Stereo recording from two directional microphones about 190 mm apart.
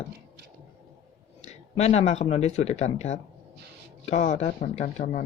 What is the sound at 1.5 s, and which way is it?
Speech, 35° left (ahead or behind).